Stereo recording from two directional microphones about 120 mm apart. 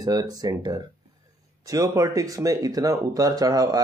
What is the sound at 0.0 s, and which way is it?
Speech, 30° right (ahead or behind).